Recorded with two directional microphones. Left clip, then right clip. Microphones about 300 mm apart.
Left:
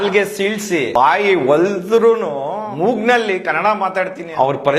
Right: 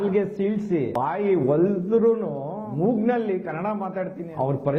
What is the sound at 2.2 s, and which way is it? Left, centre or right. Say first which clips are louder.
Speech: left 10 dB; left.